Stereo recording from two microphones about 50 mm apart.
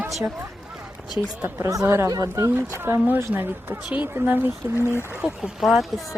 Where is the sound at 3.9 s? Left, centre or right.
Right.